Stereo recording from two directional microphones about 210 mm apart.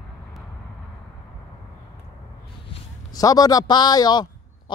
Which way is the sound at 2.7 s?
20° left (ahead or behind).